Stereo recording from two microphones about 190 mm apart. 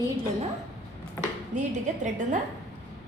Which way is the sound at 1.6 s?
40° right (ahead or behind).